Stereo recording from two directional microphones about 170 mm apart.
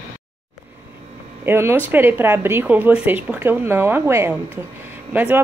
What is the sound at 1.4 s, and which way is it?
Speech, 15° right (ahead or behind).